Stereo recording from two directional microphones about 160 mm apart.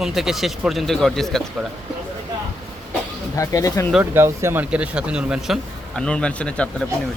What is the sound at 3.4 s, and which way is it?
Speech, 20° left (ahead or behind).